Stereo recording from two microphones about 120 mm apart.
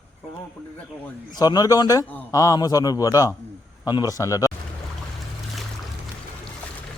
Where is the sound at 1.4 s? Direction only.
35° left (ahead or behind).